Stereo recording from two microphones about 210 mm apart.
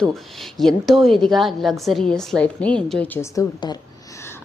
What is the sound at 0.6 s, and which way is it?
A woman's voice, centre (ahead or behind).